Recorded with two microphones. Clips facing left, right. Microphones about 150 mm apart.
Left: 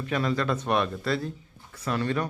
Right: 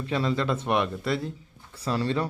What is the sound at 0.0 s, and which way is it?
Speech, 25° right (ahead or behind).